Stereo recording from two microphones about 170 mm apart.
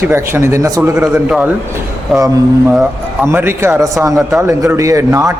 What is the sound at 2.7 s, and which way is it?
A man's voice, 10° right (ahead or behind).